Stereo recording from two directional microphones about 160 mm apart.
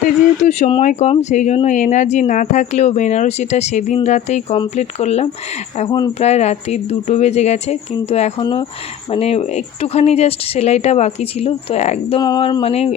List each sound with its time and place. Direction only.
0.0 s speech: 50° left (ahead or behind)
8.4 s speech: 30° left (ahead or behind)
9.0 s speech: 40° left (ahead or behind)